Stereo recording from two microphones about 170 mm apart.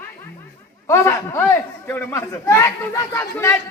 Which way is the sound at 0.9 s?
15° left (ahead or behind).